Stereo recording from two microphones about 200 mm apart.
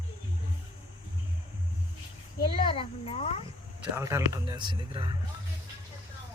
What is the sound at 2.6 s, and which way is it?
Speech, 25° left (ahead or behind).